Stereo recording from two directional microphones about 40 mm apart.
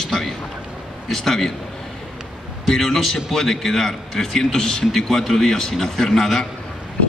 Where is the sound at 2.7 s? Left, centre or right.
Centre.